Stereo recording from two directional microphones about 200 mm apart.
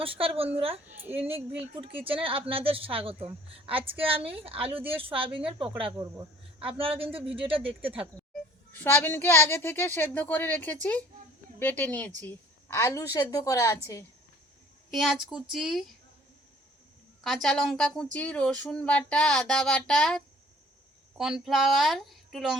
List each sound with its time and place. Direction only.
0.0 s a woman's voice: 25° right (ahead or behind)
0.9 s a woman's voice: 10° right (ahead or behind)
1.2 s a woman's voice: 30° right (ahead or behind)
8.7 s a woman's voice: 10° left (ahead or behind)
14.8 s a woman's voice: centre (ahead or behind)
17.2 s a woman's voice: centre (ahead or behind)